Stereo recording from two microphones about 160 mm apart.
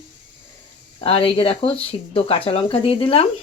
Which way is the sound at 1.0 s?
35° left (ahead or behind).